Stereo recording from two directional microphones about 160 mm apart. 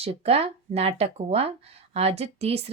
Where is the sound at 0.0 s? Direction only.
40° right (ahead or behind).